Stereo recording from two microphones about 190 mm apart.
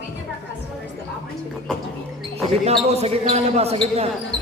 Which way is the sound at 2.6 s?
35° right (ahead or behind).